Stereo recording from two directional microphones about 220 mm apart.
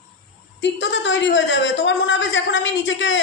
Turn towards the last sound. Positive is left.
turn(degrees=55)  # may be behind; listen again after turning